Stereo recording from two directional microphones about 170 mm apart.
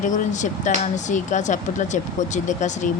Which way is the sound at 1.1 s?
45° left (ahead or behind).